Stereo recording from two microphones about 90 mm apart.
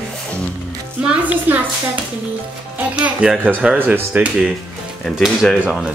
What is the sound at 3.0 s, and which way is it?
Speech, 15° right (ahead or behind).